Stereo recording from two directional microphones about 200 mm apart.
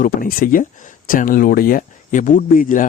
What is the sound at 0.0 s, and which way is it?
Speech, 45° left (ahead or behind).